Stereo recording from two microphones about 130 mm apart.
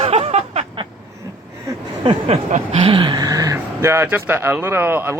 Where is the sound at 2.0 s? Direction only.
45° right (ahead or behind).